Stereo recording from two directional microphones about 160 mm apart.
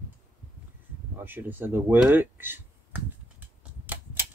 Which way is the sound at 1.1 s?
10° right (ahead or behind).